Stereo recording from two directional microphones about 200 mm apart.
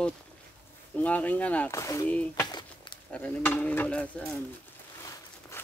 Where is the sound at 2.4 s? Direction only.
20° left (ahead or behind).